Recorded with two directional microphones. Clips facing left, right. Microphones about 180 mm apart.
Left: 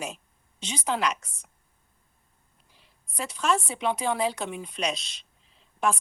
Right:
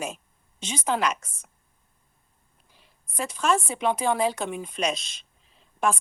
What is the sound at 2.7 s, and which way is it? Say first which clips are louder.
A woman's voice: right 3 dB; 50° right (ahead or behind).